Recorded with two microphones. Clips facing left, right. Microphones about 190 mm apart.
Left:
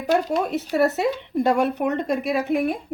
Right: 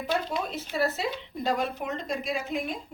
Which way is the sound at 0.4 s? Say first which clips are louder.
Left 8 dB; 70° left (ahead or behind).